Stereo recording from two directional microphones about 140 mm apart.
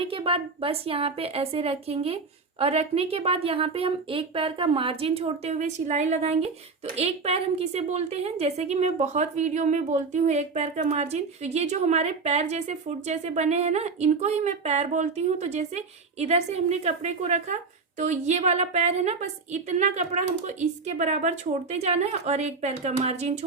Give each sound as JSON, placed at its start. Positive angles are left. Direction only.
{"t": 0.0, "sound": "a woman's voice", "side_deg": -40}